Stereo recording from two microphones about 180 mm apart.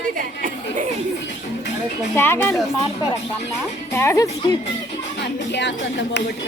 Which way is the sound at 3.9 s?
15° left (ahead or behind).